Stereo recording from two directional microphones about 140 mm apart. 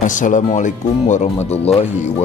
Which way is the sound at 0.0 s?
65° left (ahead or behind).